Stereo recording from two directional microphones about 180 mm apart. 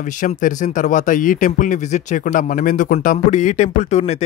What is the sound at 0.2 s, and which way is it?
A man's voice, 45° left (ahead or behind).